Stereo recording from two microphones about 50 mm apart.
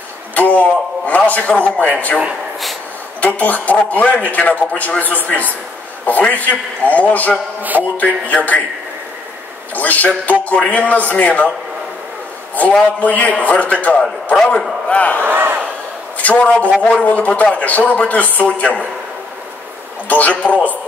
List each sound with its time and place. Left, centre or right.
0.3 s a man's voice: left
3.2 s a man's voice: left
9.8 s a man's voice: left
13.0 s a man's voice: left
14.3 s a man's voice: centre
14.9 s battle cry: left
15.2 s a sound: right
16.2 s a woman's voice: left
20.1 s a man's voice: left